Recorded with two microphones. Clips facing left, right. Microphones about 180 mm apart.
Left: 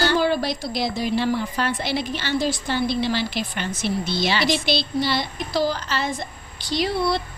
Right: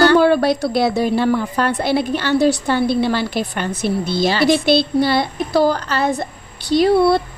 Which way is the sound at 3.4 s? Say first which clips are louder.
Right 5 dB; 40° right (ahead or behind).